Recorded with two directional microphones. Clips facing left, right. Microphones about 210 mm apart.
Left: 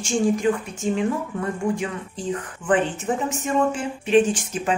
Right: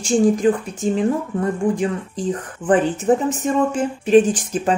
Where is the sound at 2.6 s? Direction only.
40° right (ahead or behind).